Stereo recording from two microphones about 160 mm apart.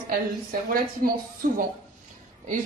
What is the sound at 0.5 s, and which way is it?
Speech, 65° right (ahead or behind).